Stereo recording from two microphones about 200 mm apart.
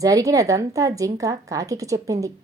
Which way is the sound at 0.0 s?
15° right (ahead or behind).